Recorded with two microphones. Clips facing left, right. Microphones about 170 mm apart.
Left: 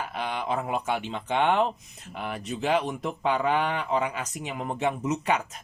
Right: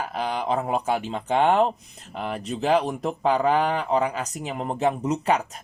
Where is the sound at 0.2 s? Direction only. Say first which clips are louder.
Right 4 dB; 35° right (ahead or behind).